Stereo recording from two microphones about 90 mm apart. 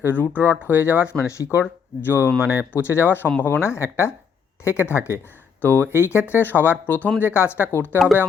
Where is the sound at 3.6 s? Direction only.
30° left (ahead or behind).